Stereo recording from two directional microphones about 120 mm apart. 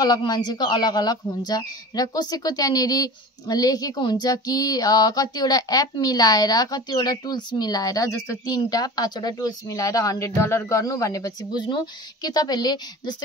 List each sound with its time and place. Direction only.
0.0 s speech: 35° left (ahead or behind)